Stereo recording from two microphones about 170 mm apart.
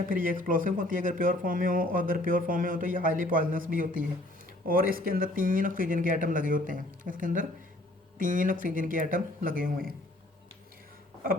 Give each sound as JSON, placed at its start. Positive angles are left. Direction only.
{"t": 0.0, "sound": "speech", "side_deg": -55}